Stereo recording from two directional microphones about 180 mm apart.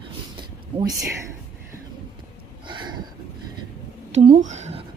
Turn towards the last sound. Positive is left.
turn(degrees=-40)  # may be behind; listen again after turning